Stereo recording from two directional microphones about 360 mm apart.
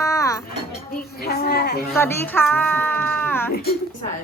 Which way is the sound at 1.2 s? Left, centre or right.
Left.